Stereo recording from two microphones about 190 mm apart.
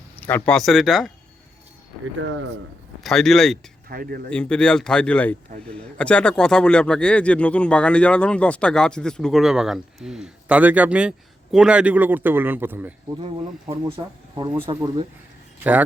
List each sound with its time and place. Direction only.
0.2 s speech: 10° left (ahead or behind)
3.0 s speech: centre (ahead or behind)
3.8 s speech: 55° right (ahead or behind)
4.3 s a man's voice: 5° left (ahead or behind); by 12.9 s 10° right (ahead or behind)
13.7 s speech: 25° right (ahead or behind)